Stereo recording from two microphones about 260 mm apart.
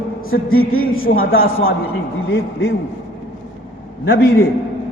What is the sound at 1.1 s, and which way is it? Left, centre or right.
Speech, left.